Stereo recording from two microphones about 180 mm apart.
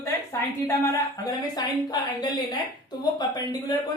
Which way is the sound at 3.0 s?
20° left (ahead or behind).